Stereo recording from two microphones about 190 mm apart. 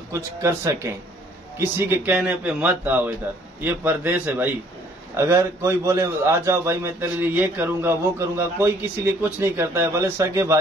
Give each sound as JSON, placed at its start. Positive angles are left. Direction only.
{"t": 0.1, "sound": "a man's voice", "side_deg": -15}